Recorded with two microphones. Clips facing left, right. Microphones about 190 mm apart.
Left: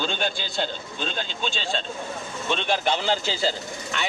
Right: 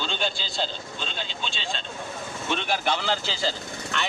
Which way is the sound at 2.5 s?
20° left (ahead or behind).